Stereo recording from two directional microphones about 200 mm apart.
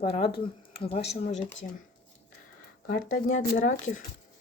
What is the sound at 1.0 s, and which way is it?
Speech, 65° left (ahead or behind).